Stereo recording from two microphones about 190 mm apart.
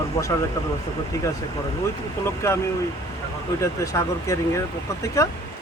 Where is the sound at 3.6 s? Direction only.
15° left (ahead or behind).